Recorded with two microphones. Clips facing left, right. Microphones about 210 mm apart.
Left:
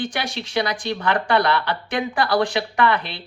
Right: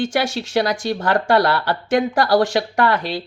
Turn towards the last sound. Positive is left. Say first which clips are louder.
# right 2 dB
turn(degrees=-40)  # may be behind; listen again after turning